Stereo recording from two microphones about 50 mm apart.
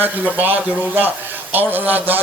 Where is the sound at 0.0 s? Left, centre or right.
Right.